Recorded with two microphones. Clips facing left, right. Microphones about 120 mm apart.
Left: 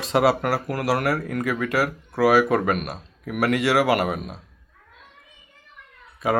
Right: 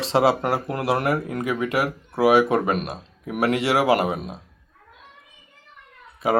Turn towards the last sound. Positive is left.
turn(degrees=-30)  # may be behind; listen again after turning